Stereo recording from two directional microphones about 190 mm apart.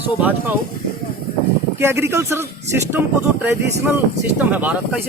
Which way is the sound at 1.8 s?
15° right (ahead or behind).